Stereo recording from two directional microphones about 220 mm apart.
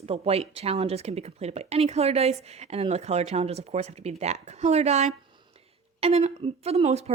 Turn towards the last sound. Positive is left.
turn(degrees=-30)  # may be behind; listen again after turning